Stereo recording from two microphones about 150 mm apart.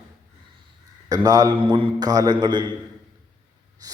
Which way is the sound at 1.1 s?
25° right (ahead or behind).